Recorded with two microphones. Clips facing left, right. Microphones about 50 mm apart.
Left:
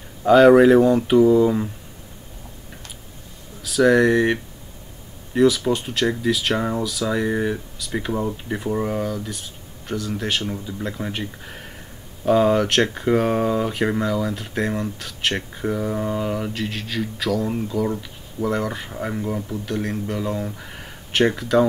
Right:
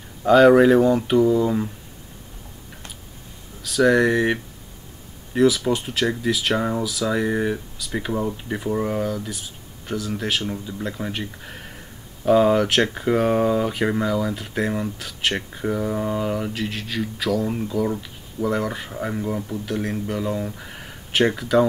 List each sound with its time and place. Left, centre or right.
0.2 s speech: centre
3.6 s speech: centre